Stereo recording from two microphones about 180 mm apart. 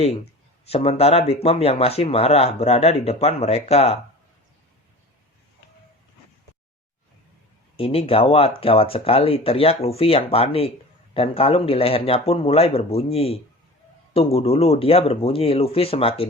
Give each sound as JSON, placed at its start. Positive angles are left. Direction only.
{"t": 0.7, "sound": "speech", "side_deg": 35}
{"t": 7.8, "sound": "speech", "side_deg": 30}